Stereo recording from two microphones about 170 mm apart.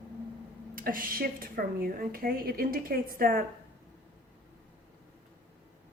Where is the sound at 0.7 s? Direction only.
55° right (ahead or behind).